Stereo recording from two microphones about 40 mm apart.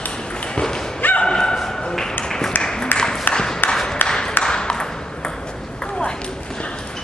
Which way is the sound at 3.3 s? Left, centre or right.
Left.